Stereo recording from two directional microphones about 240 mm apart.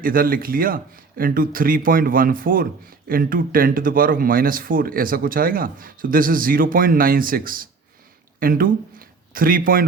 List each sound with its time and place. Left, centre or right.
0.0 s speech: right